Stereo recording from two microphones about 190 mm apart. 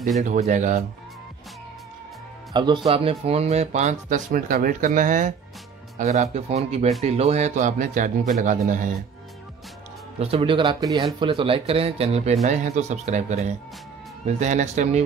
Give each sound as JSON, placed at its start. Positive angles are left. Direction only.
{"t": 0.2, "sound": "speech", "side_deg": -40}
{"t": 2.5, "sound": "speech", "side_deg": -25}
{"t": 10.1, "sound": "speech", "side_deg": -30}